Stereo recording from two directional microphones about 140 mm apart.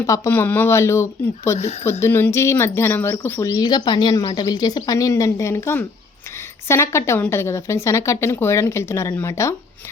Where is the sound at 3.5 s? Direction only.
30° left (ahead or behind).